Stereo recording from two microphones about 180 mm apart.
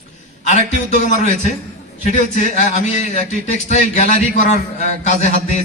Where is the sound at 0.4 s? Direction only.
40° left (ahead or behind).